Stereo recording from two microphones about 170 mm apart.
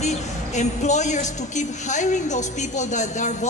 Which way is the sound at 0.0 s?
40° left (ahead or behind).